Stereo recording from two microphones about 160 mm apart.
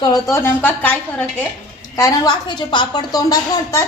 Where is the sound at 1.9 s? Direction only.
25° left (ahead or behind).